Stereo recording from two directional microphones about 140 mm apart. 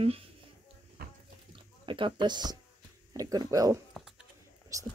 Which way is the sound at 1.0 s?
90° right.